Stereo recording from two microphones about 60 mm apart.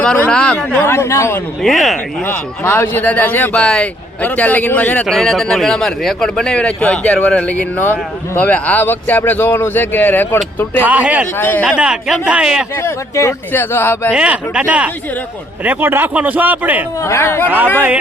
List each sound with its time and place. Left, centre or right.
0.0 s speech: centre
0.8 s speech: left
1.6 s speech: centre
2.2 s speech: left
3.5 s speech: centre
4.2 s a man's voice: left
5.0 s speech: centre; by 10.8 s left
10.8 s speech: right
11.3 s speech: left
11.8 s speech: centre
13.5 s speech: left
14.1 s speech: centre
17.0 s speech: left